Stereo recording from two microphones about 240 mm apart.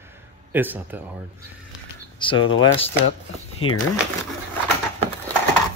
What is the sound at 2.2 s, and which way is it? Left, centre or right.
Speech, centre.